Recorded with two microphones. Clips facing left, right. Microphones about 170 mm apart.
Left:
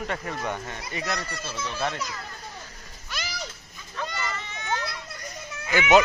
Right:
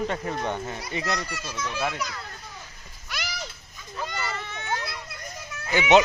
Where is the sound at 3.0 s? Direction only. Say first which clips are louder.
Right 1 dB; 15° right (ahead or behind).